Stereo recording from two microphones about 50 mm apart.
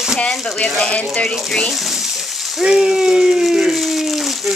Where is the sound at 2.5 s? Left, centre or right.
Centre.